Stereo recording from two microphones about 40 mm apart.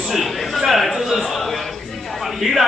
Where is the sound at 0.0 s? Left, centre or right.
Centre.